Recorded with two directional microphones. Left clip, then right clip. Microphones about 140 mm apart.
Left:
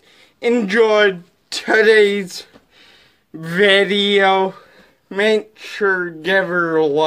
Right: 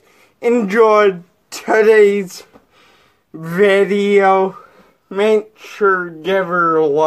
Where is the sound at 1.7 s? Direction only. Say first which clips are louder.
Right 2 dB; 25° left (ahead or behind).